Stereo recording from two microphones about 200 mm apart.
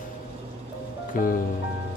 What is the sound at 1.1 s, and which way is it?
Music, 45° left (ahead or behind).